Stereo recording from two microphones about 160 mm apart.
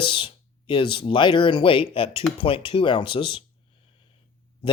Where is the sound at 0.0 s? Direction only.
30° left (ahead or behind).